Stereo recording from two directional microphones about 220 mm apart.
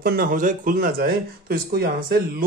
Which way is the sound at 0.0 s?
40° right (ahead or behind).